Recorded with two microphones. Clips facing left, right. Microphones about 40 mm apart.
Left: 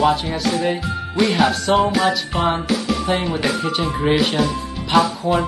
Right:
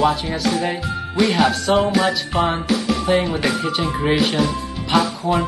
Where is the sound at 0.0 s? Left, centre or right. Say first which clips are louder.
Left 1 dB; centre.